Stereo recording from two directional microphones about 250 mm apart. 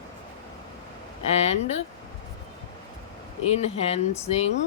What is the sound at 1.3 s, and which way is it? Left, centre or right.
Speech, left.